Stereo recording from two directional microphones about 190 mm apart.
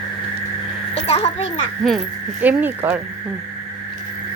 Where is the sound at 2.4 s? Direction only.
10° right (ahead or behind).